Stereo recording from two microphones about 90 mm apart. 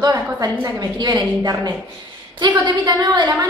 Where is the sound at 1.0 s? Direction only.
55° right (ahead or behind).